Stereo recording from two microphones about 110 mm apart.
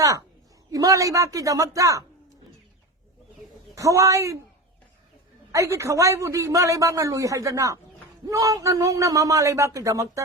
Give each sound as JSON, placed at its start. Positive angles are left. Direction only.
{"t": 0.7, "sound": "a man's voice", "side_deg": -30}
{"t": 3.8, "sound": "a man's voice", "side_deg": -30}
{"t": 5.5, "sound": "a man's voice", "side_deg": -30}